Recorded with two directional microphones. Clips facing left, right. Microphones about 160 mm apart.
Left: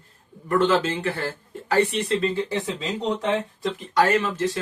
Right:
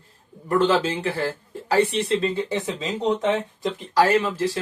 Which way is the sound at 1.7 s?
30° right (ahead or behind).